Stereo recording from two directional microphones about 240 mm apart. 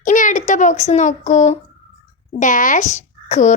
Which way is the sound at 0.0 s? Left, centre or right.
Left.